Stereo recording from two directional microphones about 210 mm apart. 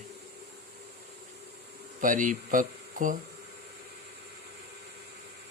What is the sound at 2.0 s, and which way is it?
Speech, 40° right (ahead or behind).